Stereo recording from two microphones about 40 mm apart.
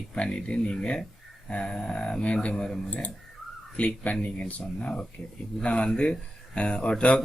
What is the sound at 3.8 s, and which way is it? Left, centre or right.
Speech, left.